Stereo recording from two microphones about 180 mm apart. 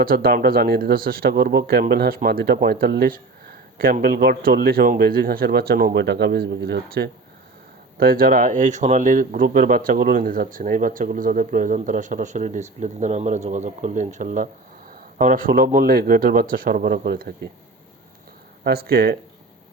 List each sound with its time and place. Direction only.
0.0 s speech: 55° right (ahead or behind)
18.6 s speech: 60° right (ahead or behind)